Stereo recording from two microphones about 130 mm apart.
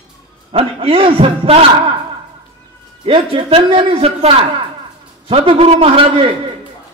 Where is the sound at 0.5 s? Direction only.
45° right (ahead or behind).